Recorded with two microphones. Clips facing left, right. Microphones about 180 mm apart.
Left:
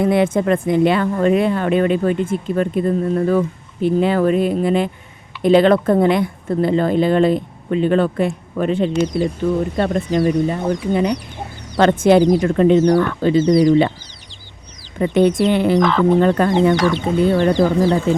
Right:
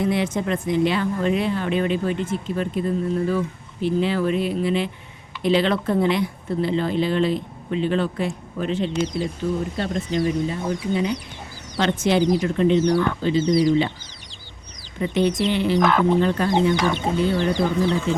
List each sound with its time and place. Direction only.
0.0 s speech: 55° left (ahead or behind)
14.9 s speech: 55° left (ahead or behind)
15.8 s speech: 5° right (ahead or behind)
16.2 s speech: 55° left (ahead or behind)